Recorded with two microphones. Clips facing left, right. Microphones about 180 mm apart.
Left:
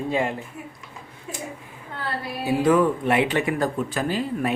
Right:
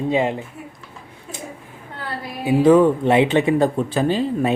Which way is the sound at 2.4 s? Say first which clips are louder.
Right 6 dB; 25° right (ahead or behind).